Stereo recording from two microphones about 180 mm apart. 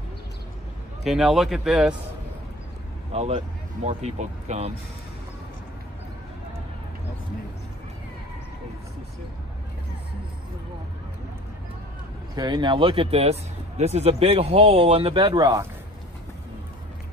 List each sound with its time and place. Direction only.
1.0 s a man's voice: centre (ahead or behind)
3.1 s speech: 35° right (ahead or behind)
12.4 s speech: 25° right (ahead or behind)